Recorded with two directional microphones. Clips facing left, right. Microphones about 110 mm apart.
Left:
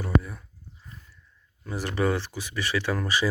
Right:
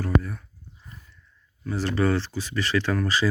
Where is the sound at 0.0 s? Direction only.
5° left (ahead or behind).